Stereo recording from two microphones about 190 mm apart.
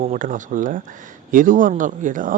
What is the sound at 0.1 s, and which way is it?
Speech, 45° right (ahead or behind).